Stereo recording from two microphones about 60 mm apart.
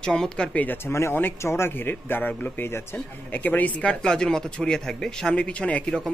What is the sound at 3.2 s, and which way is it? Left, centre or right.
Speech, left.